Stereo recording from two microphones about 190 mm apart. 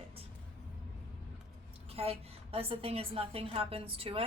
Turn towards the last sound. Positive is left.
turn(degrees=-30)  # may be behind; listen again after turning